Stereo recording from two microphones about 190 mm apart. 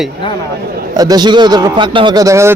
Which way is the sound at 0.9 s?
20° right (ahead or behind).